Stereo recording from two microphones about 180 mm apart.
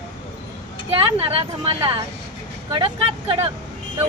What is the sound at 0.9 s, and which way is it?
Speech, 30° right (ahead or behind).